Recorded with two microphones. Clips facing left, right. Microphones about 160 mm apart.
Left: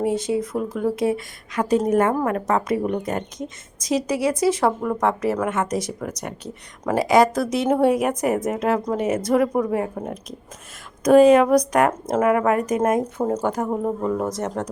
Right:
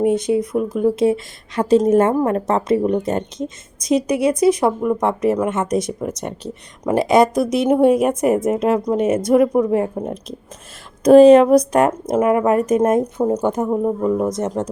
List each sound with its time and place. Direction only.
0.0 s a woman's voice: 20° right (ahead or behind)
11.9 s speech: 15° right (ahead or behind)
12.3 s a woman's voice: 25° right (ahead or behind)